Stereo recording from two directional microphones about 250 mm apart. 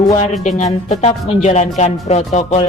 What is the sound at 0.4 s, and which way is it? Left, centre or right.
Speech, left.